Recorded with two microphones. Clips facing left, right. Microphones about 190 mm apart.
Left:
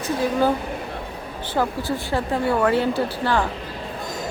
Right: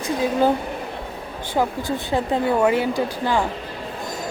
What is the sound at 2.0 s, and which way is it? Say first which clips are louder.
Speech: right 2 dB; 20° right (ahead or behind).